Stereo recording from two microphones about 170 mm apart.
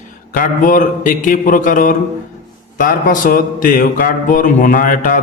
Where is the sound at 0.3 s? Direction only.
50° left (ahead or behind).